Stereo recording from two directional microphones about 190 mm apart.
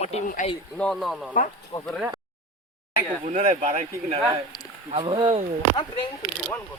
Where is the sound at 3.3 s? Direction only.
40° right (ahead or behind).